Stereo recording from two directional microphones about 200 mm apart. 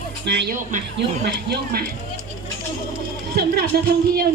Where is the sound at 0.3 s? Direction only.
55° right (ahead or behind).